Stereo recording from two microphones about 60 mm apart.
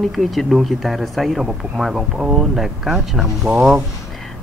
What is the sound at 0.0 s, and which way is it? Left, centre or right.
Speech, centre.